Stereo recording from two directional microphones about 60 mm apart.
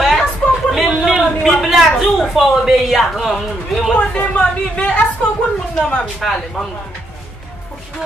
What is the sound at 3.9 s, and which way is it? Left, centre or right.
Speech, left.